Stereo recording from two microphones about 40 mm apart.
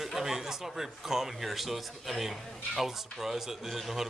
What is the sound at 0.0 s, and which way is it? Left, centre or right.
Speech, centre.